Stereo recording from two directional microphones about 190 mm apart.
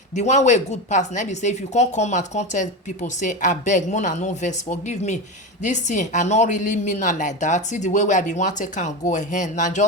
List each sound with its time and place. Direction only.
0.2 s a woman's voice: 40° left (ahead or behind)